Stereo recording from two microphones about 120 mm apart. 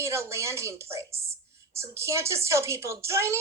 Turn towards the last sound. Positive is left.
turn(degrees=-20)  # may be behind; listen again after turning